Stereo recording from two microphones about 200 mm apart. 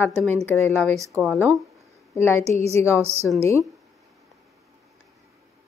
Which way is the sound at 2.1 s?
10° left (ahead or behind).